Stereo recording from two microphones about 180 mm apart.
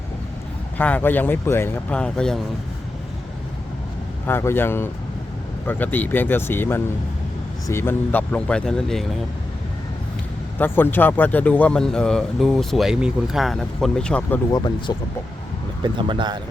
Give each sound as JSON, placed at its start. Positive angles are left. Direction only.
{"t": 0.8, "sound": "speech", "side_deg": 10}
{"t": 4.3, "sound": "speech", "side_deg": 15}
{"t": 10.6, "sound": "speech", "side_deg": 10}
{"t": 14.5, "sound": "speech", "side_deg": 25}
{"t": 15.8, "sound": "speech", "side_deg": -25}